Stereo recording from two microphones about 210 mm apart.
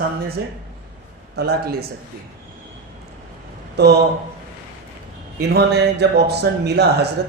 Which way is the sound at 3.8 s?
55° right (ahead or behind).